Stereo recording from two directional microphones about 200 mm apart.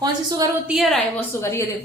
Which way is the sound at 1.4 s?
15° left (ahead or behind).